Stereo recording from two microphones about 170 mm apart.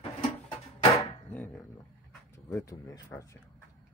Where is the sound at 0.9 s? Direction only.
15° left (ahead or behind).